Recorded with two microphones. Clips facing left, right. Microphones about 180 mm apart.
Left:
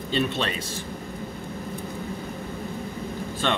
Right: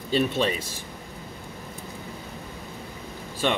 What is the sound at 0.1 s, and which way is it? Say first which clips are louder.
Speech: right 3 dB; 10° right (ahead or behind).